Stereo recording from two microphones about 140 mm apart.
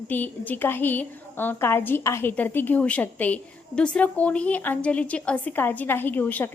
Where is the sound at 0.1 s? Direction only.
10° left (ahead or behind).